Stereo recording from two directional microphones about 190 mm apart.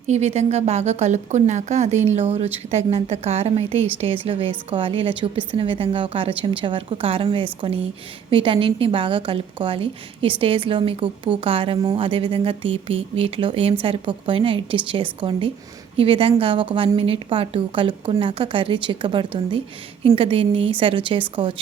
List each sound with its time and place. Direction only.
0.1 s a woman's voice: 35° right (ahead or behind)